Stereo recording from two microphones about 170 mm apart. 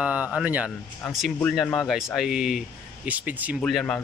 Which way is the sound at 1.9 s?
Centre (ahead or behind).